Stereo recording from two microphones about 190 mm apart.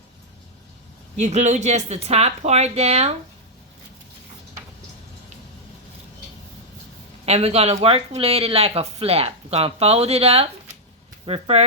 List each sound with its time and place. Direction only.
1.2 s speech: 35° right (ahead or behind)
7.3 s speech: 35° right (ahead or behind)